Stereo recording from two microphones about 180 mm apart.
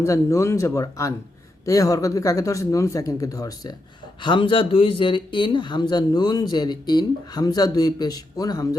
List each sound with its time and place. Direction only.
0.0 s speech: 15° left (ahead or behind)